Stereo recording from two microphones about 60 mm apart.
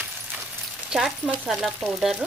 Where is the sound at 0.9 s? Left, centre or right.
Centre.